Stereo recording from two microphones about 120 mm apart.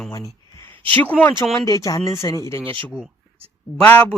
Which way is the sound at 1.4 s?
25° left (ahead or behind).